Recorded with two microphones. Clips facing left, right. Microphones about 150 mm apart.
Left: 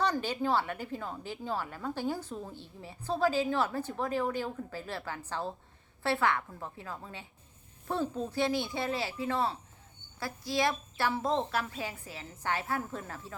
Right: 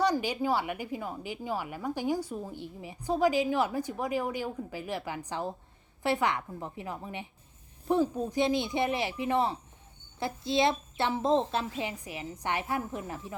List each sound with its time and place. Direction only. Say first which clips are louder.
0.0 s a woman's voice: right 3 dB; 10° right (ahead or behind)